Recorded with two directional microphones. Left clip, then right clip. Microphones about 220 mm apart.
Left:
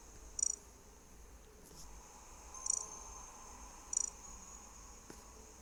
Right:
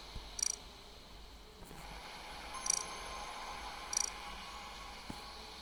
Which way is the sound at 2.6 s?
30° right (ahead or behind).